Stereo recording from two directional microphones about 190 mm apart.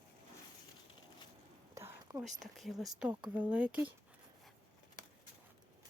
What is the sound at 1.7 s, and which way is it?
Whispering, 15° right (ahead or behind).